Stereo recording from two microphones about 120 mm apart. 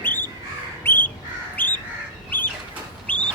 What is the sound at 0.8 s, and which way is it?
Crow, 15° left (ahead or behind).